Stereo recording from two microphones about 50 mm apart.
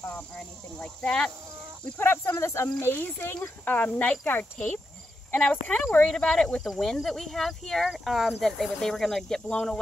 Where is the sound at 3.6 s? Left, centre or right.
Left; by 7.9 s centre.